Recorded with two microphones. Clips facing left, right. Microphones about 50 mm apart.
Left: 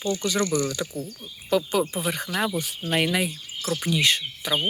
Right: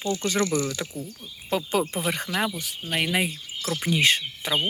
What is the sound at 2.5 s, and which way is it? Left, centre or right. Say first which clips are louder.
Speech: left 5 dB; left.